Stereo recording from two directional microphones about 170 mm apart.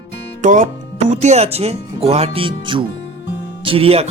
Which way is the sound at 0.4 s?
50° right (ahead or behind).